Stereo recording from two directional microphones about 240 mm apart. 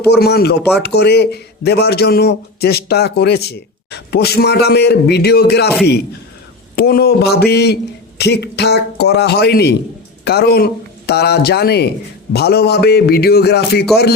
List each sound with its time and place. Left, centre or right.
0.1 s a man's voice: left